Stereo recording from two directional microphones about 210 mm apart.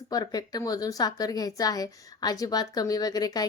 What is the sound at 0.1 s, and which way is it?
Speech, 20° left (ahead or behind).